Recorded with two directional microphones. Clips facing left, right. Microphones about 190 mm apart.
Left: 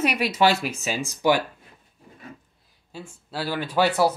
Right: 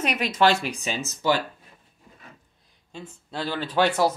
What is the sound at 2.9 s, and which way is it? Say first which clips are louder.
Speech: left 1 dB; 5° left (ahead or behind).